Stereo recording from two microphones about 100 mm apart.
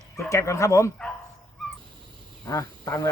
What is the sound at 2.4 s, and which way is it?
Speech, 40° left (ahead or behind).